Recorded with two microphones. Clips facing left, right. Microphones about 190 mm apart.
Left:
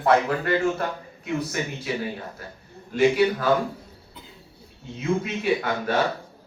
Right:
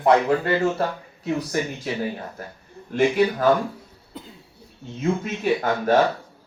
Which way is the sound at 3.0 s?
50° right (ahead or behind).